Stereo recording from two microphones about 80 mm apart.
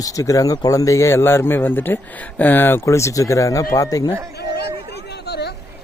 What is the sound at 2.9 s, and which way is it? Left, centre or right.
Speech, left.